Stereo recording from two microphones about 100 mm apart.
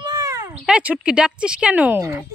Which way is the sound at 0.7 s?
10° right (ahead or behind).